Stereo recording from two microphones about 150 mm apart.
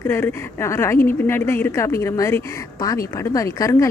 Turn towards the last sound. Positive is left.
turn(degrees=20)  # may be behind; listen again after turning